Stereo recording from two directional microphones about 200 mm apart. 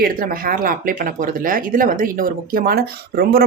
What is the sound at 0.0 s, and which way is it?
Speech, 45° right (ahead or behind).